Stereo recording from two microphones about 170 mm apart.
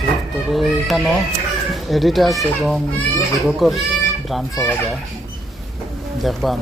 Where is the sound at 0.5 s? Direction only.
Centre (ahead or behind).